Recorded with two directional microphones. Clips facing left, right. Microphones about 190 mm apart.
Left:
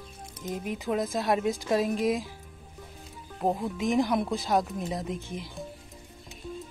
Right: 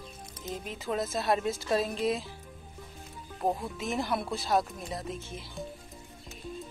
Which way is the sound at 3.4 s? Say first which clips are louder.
Left 3 dB; 15° left (ahead or behind).